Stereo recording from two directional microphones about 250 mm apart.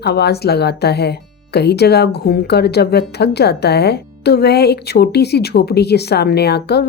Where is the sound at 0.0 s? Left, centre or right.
Left.